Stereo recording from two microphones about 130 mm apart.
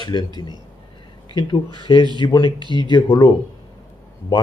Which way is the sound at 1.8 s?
40° left (ahead or behind).